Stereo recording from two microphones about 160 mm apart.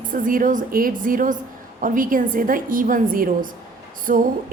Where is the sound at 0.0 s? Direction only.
55° right (ahead or behind).